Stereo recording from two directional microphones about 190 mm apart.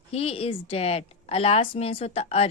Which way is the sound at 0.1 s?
30° left (ahead or behind).